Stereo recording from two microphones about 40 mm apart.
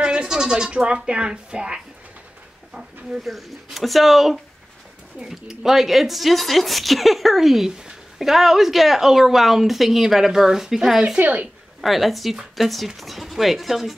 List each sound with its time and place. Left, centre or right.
0.0 s speech: right
3.3 s a woman's voice: centre
11.1 s speech: right
11.8 s speech: centre